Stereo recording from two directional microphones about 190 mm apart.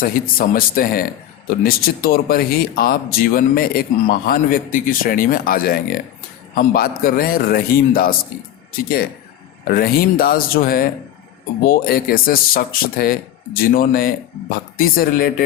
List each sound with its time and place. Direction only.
0.0 s speech: 50° left (ahead or behind)
9.6 s speech: 50° left (ahead or behind)